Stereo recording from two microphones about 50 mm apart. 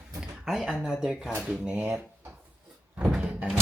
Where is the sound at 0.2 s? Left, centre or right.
Centre.